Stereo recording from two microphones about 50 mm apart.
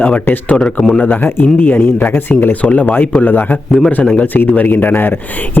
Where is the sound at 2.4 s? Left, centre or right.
Left.